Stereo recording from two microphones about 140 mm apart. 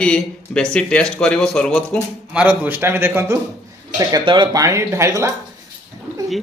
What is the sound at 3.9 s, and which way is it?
Speech, 30° right (ahead or behind).